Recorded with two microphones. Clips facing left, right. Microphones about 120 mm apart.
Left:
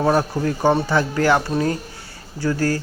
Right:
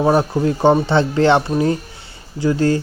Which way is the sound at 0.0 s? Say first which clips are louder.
Right 3 dB; 20° right (ahead or behind).